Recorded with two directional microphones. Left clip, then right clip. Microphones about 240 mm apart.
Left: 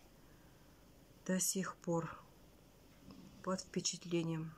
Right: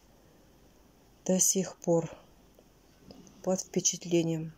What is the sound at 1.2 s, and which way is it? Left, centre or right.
Speech, centre.